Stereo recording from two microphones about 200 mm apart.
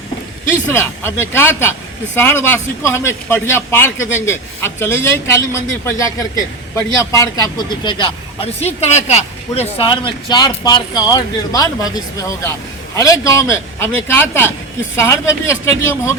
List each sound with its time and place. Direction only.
0.4 s a man's voice: 10° left (ahead or behind)